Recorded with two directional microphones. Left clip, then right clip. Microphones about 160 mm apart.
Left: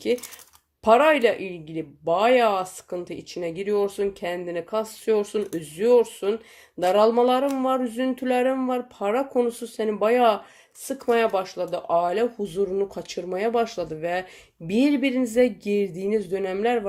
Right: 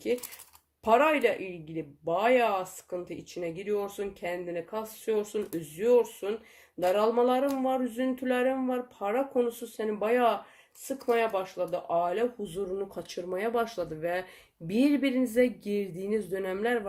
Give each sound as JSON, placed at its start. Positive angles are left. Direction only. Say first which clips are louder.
{"t": 0.9, "sound": "speech", "louder": "left 6 dB", "side_deg": 40}
{"t": 12.9, "sound": "speech", "louder": "left 5 dB", "side_deg": 30}